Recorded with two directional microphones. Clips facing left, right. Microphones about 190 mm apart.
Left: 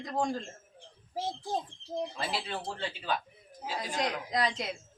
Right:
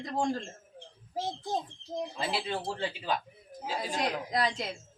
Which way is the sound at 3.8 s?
5° right (ahead or behind).